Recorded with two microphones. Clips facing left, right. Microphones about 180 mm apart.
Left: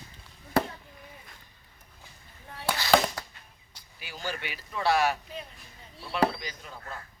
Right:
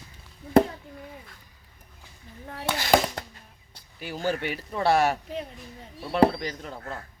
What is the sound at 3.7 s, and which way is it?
Speech, 55° right (ahead or behind).